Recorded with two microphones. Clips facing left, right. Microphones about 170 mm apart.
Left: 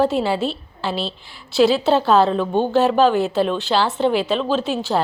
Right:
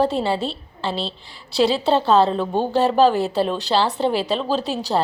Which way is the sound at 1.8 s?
Centre (ahead or behind).